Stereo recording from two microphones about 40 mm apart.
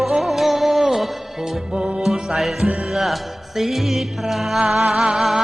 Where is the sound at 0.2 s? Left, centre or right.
Centre.